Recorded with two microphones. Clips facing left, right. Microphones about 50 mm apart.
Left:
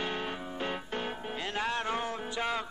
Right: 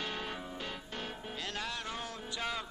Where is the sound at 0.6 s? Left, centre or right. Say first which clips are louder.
Left 7 dB; left.